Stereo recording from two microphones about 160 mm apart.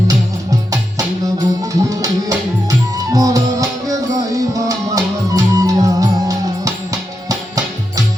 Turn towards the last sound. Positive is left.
turn(degrees=-20)  # may be behind; listen again after turning